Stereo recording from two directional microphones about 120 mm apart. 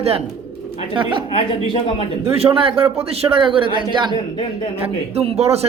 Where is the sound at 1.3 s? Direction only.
50° left (ahead or behind).